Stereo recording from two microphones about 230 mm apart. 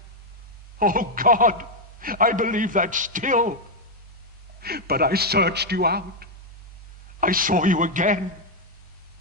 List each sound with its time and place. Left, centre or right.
0.8 s a man's voice: right
4.6 s a man's voice: right